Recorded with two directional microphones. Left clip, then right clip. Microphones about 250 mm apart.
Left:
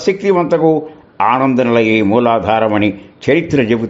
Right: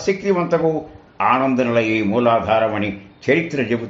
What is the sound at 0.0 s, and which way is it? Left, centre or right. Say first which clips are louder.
Speech: left 6 dB; left.